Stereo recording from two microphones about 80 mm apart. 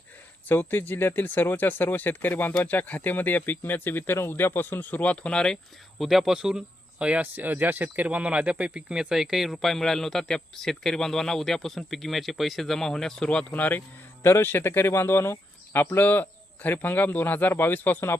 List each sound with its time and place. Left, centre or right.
0.4 s speech: left
6.0 s speech: centre
7.0 s speech: centre; by 18.2 s left